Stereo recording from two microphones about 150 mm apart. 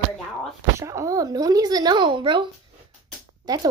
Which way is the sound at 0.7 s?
20° right (ahead or behind).